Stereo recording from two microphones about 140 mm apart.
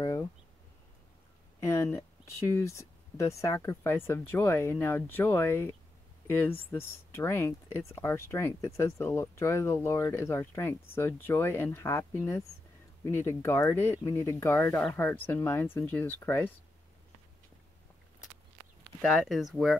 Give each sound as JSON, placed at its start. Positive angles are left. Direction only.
{"t": 1.6, "sound": "speech", "side_deg": 20}
{"t": 18.9, "sound": "speech", "side_deg": 0}